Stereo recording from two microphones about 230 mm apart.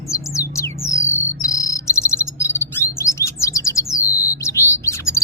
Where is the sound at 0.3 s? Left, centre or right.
Centre.